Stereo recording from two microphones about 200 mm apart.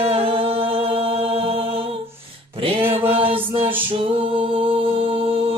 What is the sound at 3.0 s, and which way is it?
Mantra, 25° right (ahead or behind).